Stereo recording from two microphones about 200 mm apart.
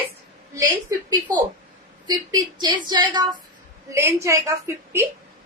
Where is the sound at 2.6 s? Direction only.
20° right (ahead or behind).